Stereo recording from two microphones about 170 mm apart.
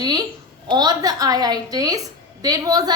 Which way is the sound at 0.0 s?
25° right (ahead or behind).